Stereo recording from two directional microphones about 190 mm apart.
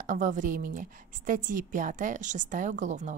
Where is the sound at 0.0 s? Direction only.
40° right (ahead or behind).